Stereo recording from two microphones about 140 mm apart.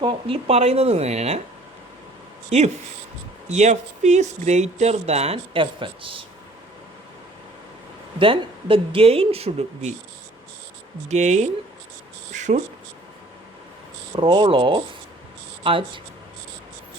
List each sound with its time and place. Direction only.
0.0 s speech: 40° right (ahead or behind)
3.5 s speech: 55° right (ahead or behind); by 6.2 s 40° right (ahead or behind)
8.2 s speech: 40° right (ahead or behind)
11.1 s speech: 55° right (ahead or behind)
12.3 s a sound: 60° right (ahead or behind)
14.2 s speech: 35° right (ahead or behind)